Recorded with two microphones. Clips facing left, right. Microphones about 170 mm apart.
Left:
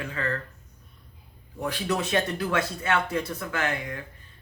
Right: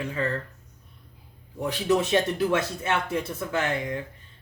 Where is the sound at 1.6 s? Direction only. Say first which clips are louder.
Right 4 dB; 25° right (ahead or behind).